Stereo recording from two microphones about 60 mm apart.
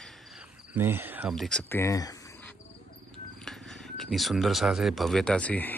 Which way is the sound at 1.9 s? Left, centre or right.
Left.